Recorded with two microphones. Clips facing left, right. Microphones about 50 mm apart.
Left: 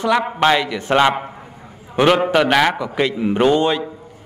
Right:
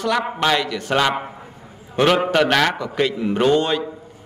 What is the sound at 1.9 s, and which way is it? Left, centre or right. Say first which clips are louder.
A man's voice: left 2 dB; centre.